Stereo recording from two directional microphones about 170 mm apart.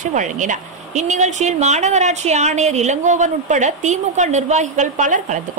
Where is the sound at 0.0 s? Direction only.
45° right (ahead or behind).